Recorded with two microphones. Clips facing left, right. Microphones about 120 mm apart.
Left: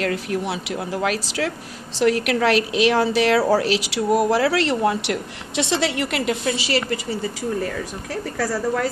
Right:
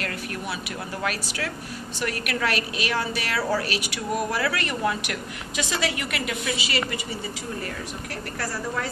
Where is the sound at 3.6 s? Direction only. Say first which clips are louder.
Left 8 dB; 90° left.